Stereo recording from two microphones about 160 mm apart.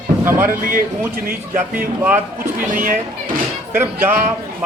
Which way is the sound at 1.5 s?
10° right (ahead or behind).